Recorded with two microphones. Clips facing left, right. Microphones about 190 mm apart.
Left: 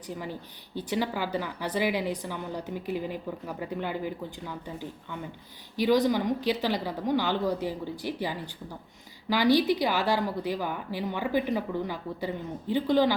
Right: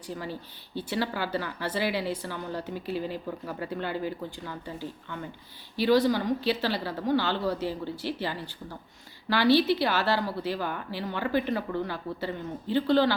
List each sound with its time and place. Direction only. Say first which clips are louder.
0.1 s a woman's voice: right 1 dB; 15° left (ahead or behind)